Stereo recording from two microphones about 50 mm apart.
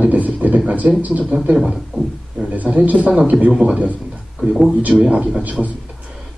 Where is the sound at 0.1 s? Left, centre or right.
Right.